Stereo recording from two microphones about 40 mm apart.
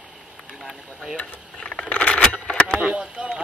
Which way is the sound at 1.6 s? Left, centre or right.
Left.